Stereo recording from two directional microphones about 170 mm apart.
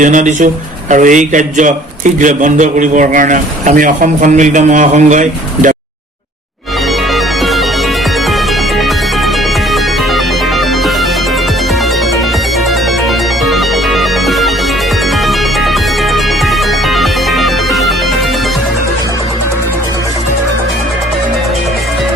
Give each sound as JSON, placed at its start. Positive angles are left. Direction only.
{"t": 0.0, "sound": "a man's voice", "side_deg": -50}
{"t": 13.4, "sound": "music", "side_deg": 0}
{"t": 16.1, "sound": "music", "side_deg": 0}